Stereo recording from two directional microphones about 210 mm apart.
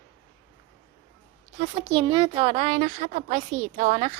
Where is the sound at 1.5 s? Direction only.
25° right (ahead or behind).